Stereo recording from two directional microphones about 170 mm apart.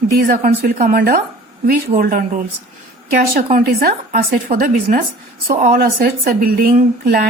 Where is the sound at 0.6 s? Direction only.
55° right (ahead or behind).